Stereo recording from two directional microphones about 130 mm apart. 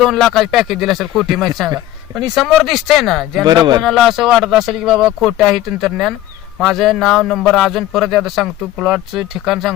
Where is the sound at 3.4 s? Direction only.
35° right (ahead or behind).